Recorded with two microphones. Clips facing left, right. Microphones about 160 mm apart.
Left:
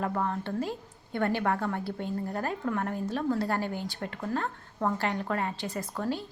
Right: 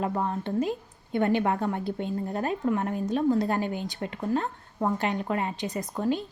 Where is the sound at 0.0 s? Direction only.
20° right (ahead or behind).